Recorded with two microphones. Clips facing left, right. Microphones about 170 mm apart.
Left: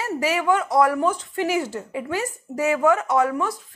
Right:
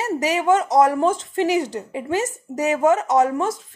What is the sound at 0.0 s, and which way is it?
Speech, 20° right (ahead or behind).